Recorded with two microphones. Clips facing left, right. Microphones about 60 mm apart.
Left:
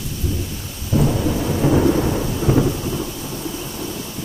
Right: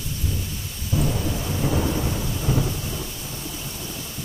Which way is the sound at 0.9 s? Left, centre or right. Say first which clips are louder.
Left 7 dB; left.